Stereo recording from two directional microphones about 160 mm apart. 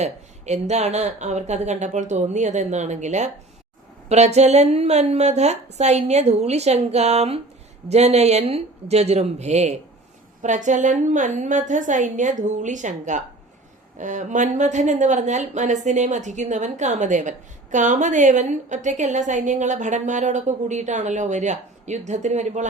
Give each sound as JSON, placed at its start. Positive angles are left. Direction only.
{"t": 0.0, "sound": "speech", "side_deg": -45}